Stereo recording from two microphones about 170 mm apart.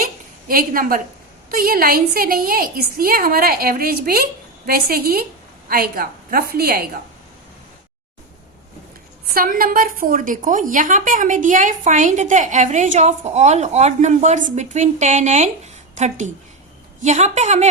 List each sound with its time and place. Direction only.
0.0 s a sound: 55° right (ahead or behind)
1.5 s a woman's voice: 60° right (ahead or behind)
9.3 s a woman's voice: 60° right (ahead or behind); by 17.7 s 40° right (ahead or behind)